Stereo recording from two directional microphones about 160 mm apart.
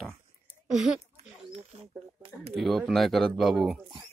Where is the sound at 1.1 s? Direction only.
40° right (ahead or behind).